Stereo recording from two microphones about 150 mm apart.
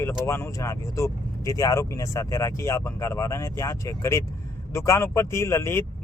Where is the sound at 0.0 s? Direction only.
15° left (ahead or behind).